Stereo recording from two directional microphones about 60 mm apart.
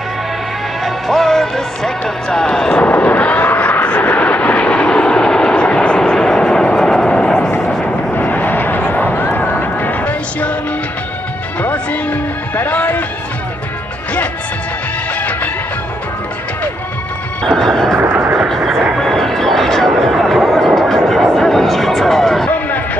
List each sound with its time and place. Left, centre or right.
0.8 s music: centre
2.8 s vehicle: left
8.2 s vehicle: left
9.4 s music: left
11.6 s music: left
17.5 s music: centre
17.9 s vehicle: right
18.9 s a sound: centre